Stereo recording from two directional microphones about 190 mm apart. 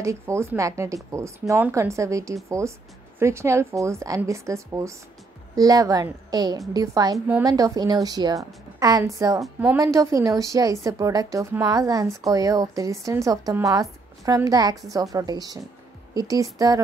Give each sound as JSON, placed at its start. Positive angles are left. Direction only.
{"t": 0.0, "sound": "a woman's voice", "side_deg": -15}
{"t": 7.2, "sound": "a woman's voice", "side_deg": -10}
{"t": 7.4, "sound": "a woman's voice", "side_deg": -20}